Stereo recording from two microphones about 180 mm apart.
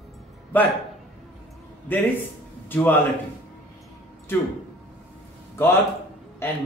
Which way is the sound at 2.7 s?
10° left (ahead or behind).